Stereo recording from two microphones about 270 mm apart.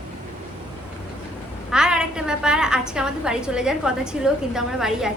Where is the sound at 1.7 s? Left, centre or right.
Centre.